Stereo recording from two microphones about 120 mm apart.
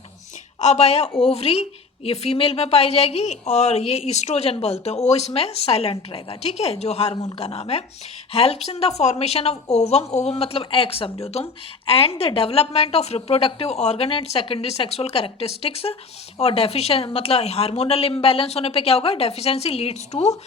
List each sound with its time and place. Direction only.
0.6 s speech: 65° left (ahead or behind)